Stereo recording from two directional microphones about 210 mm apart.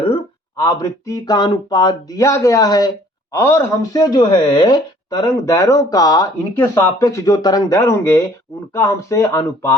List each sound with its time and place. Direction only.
0.5 s speech: 15° left (ahead or behind)